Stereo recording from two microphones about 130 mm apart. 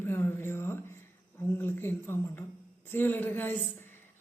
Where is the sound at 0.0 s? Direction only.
20° left (ahead or behind).